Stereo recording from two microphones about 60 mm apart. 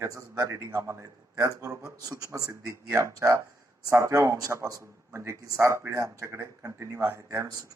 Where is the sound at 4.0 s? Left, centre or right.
Right.